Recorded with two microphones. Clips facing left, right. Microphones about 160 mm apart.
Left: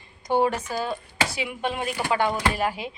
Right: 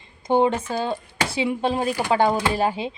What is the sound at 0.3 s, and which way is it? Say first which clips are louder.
Speech: right 3 dB; 25° right (ahead or behind).